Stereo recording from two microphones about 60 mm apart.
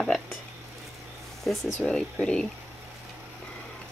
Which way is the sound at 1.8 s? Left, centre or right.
Centre.